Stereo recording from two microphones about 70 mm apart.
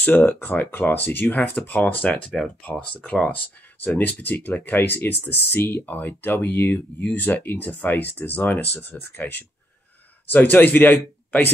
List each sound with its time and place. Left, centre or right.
0.0 s speech: left